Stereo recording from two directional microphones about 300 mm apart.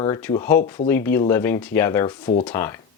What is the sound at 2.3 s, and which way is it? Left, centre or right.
Speech, left.